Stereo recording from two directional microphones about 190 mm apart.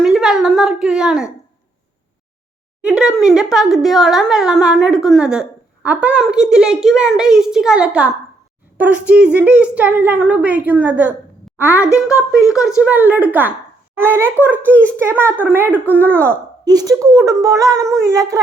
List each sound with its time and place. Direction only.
0.0 s a woman's voice: centre (ahead or behind)
2.8 s a woman's voice: 5° right (ahead or behind)
12.1 s a woman's voice: 15° left (ahead or behind)
12.8 s a child's voice: 10° right (ahead or behind)